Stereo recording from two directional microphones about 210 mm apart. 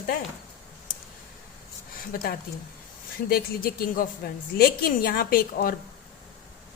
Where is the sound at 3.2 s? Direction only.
45° left (ahead or behind).